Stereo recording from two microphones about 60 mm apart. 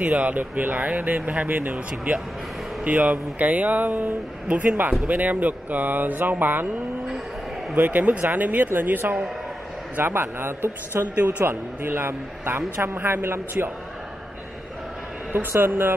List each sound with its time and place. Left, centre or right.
0.0 s speech: right
7.7 s speech: right
15.6 s speech: right